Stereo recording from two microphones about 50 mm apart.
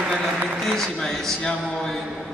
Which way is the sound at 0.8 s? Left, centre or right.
Centre.